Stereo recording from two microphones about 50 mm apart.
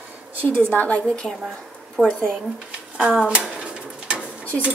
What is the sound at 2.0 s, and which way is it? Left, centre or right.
Speech, right.